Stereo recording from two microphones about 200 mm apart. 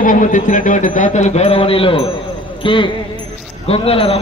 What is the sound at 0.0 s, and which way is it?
A man's voice, 40° left (ahead or behind).